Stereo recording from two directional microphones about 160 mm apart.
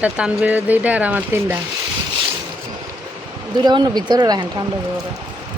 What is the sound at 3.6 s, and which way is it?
Speech, 25° right (ahead or behind).